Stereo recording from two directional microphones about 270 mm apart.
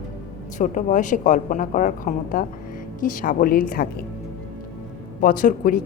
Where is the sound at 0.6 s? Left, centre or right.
Left.